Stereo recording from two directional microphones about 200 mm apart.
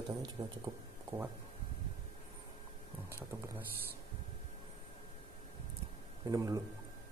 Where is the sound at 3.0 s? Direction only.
15° right (ahead or behind).